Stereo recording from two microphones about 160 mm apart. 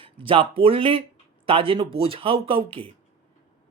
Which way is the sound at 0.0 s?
35° right (ahead or behind).